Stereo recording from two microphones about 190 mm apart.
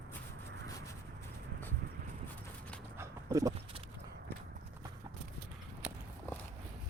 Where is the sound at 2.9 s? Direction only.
15° right (ahead or behind).